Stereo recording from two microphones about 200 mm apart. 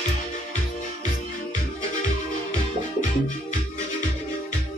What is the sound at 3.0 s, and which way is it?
Music, 40° left (ahead or behind).